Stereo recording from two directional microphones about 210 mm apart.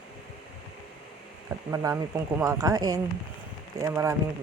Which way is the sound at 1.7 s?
15° right (ahead or behind).